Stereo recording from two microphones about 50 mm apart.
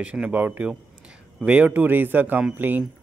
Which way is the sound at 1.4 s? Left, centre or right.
Right.